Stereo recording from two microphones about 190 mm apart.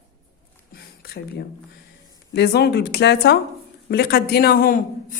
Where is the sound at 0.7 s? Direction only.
55° left (ahead or behind).